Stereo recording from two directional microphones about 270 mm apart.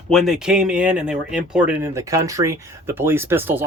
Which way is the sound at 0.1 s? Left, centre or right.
Centre.